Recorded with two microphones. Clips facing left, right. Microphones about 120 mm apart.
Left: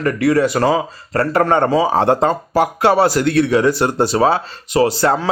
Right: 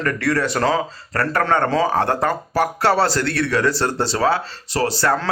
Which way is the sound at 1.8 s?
20° left (ahead or behind).